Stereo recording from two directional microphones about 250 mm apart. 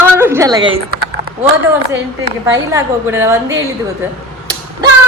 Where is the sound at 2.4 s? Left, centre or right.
Centre.